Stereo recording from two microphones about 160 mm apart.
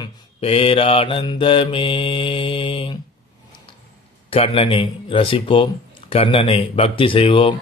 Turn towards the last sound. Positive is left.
turn(degrees=35)  # may be behind; listen again after turning